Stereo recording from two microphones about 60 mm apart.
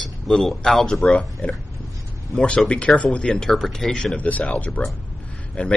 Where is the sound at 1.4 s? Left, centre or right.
Left.